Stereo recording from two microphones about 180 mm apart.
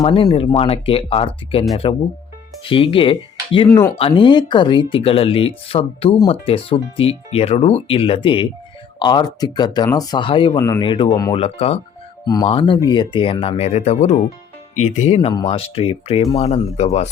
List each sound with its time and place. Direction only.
0.0 s speech: 35° left (ahead or behind)
3.7 s speech: 15° left (ahead or behind)
3.9 s speech: 30° left (ahead or behind)